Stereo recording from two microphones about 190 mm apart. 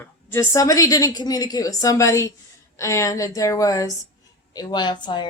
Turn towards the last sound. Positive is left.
turn(degrees=25)  # may be behind; listen again after turning